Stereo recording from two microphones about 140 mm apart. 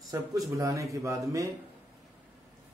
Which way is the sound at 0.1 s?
20° right (ahead or behind).